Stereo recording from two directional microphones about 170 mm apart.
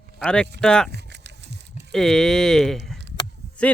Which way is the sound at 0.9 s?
85° right.